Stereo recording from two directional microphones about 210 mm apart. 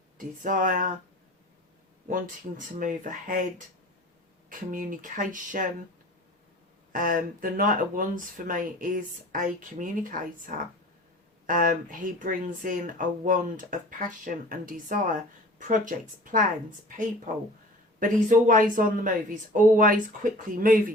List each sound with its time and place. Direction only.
0.2 s speech: 40° right (ahead or behind)
2.0 s speech: 40° right (ahead or behind)
4.4 s speech: 40° right (ahead or behind)
6.9 s speech: 40° right (ahead or behind)
18.0 s speech: 40° right (ahead or behind)